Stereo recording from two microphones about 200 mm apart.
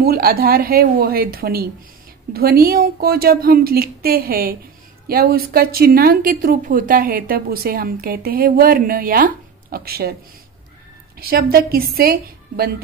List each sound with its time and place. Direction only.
0.0 s speech: 50° right (ahead or behind)
11.1 s speech: 50° right (ahead or behind)